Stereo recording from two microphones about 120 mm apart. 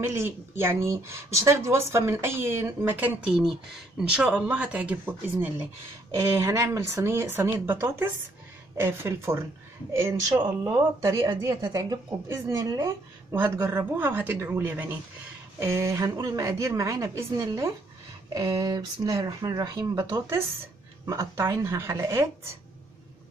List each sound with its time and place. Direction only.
0.0 s speech: 20° right (ahead or behind); by 20.1 s 35° right (ahead or behind)
21.1 s speech: 25° right (ahead or behind)